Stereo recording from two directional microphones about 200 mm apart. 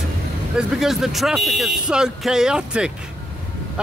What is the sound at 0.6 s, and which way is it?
Speech, centre (ahead or behind).